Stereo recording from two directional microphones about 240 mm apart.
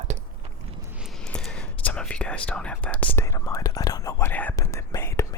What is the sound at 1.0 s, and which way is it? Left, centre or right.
Whispering, centre.